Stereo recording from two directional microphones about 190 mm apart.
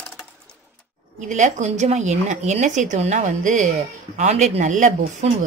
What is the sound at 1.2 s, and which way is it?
A woman's voice, 40° right (ahead or behind).